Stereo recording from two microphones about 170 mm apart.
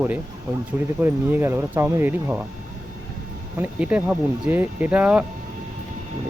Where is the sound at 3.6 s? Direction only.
10° right (ahead or behind).